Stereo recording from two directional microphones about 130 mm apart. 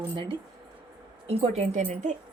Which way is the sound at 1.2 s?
50° right (ahead or behind).